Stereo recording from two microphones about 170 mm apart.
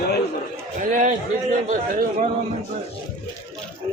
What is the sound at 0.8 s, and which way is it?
Speech, 45° right (ahead or behind).